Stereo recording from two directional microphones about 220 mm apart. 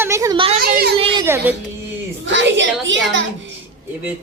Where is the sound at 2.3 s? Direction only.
55° right (ahead or behind).